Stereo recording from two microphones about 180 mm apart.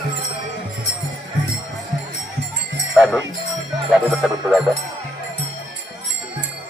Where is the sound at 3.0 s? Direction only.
Centre (ahead or behind).